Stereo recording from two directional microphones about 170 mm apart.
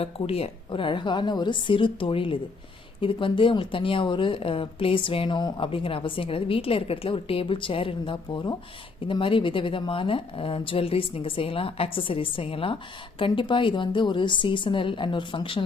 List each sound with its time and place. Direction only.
0.0 s a woman's voice: 35° left (ahead or behind)